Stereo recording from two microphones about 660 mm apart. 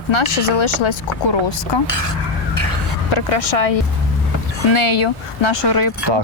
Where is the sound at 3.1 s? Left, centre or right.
Left.